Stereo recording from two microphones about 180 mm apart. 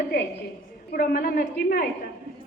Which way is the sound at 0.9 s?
55° left (ahead or behind).